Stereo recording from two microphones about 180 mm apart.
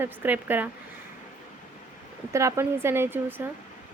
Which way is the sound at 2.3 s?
15° right (ahead or behind).